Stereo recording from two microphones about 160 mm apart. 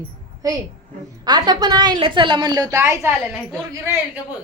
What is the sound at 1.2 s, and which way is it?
A woman's voice, 25° right (ahead or behind).